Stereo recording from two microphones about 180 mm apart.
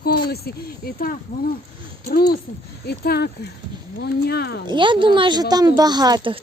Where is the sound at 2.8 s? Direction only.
60° left (ahead or behind).